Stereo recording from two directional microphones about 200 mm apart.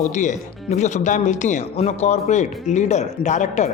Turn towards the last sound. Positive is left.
turn(degrees=35)  # may be behind; listen again after turning